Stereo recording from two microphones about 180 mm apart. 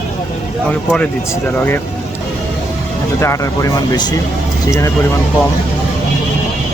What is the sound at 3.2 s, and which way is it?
Speech, 15° left (ahead or behind).